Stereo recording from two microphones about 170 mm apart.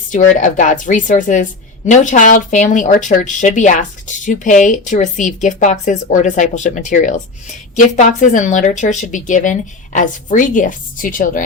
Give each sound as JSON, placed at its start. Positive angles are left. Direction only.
{"t": 0.1, "sound": "speech", "side_deg": 45}